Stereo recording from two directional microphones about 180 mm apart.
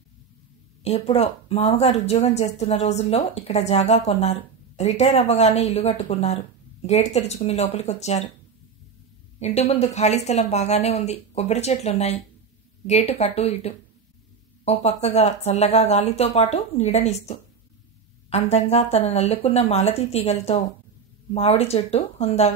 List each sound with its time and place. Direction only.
0.8 s speech: 35° left (ahead or behind)
9.4 s speech: 35° left (ahead or behind)